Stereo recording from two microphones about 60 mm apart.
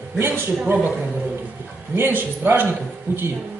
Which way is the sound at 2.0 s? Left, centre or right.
Right.